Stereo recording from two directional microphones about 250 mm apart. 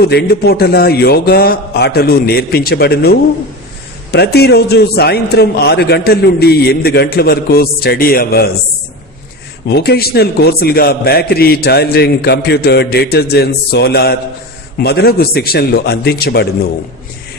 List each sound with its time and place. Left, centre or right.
0.0 s a man's voice: left
9.7 s a man's voice: left